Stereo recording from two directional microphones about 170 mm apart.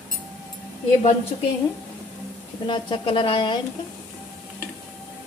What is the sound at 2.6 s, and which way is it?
Speech, 30° left (ahead or behind).